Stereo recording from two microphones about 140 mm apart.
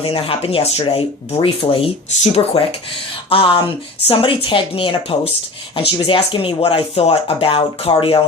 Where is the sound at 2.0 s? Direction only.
55° left (ahead or behind).